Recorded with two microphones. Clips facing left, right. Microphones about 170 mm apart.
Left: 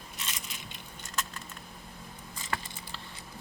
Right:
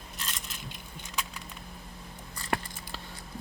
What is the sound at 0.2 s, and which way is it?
Coin, centre (ahead or behind).